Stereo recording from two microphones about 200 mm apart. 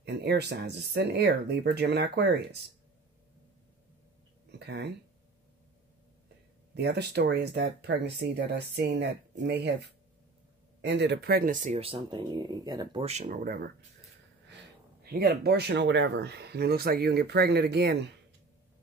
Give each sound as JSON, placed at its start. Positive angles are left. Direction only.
{"t": 0.0, "sound": "speech", "side_deg": -55}
{"t": 4.5, "sound": "a sound", "side_deg": -55}
{"t": 6.7, "sound": "speech", "side_deg": -55}
{"t": 13.0, "sound": "speech", "side_deg": -30}
{"t": 13.3, "sound": "speech", "side_deg": -45}
{"t": 15.0, "sound": "speech", "side_deg": -50}